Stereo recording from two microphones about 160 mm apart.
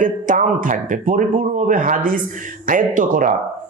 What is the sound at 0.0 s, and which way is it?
A man's voice, 55° right (ahead or behind).